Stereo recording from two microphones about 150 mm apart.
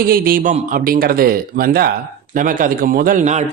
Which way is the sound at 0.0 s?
80° right.